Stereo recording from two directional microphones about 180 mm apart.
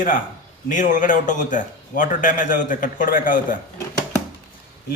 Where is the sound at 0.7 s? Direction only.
45° left (ahead or behind).